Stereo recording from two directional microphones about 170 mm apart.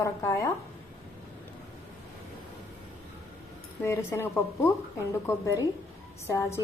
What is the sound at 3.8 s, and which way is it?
A woman's voice, 15° left (ahead or behind).